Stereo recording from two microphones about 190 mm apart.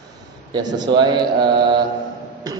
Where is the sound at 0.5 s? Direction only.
20° right (ahead or behind).